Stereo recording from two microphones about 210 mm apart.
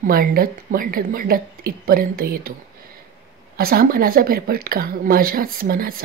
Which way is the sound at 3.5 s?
45° right (ahead or behind).